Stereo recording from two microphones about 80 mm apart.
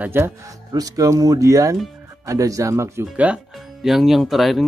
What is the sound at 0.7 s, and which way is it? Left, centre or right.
Speech, right.